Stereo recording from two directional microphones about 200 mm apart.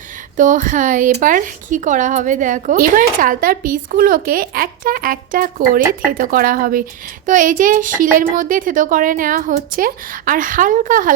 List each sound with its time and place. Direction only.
0.3 s speech: 40° right (ahead or behind)